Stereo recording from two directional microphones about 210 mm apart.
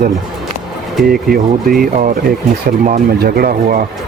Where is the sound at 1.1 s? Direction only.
45° right (ahead or behind).